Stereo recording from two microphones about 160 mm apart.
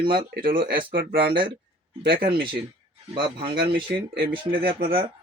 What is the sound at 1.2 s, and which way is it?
Speech, 35° right (ahead or behind).